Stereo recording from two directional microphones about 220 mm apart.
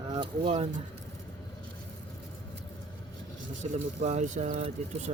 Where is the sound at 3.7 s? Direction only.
30° right (ahead or behind).